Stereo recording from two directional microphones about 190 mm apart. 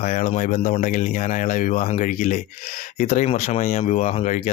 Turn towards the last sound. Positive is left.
turn(degrees=35)  # may be behind; listen again after turning